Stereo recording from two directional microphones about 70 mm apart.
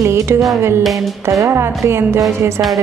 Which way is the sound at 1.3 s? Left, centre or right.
Right.